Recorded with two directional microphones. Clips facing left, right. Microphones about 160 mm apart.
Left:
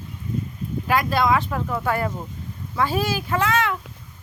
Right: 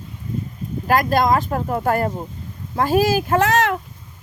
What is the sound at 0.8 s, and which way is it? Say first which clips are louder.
Speech: right 3 dB; 45° right (ahead or behind).